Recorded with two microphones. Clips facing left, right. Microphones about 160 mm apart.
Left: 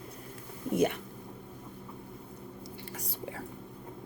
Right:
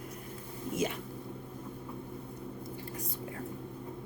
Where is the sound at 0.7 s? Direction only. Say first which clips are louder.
Left 6 dB; 60° left (ahead or behind).